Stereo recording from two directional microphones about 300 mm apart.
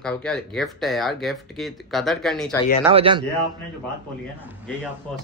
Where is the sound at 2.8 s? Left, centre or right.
Centre.